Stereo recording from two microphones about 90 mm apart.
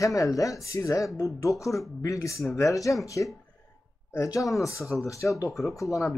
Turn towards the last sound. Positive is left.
turn(degrees=35)  # may be behind; listen again after turning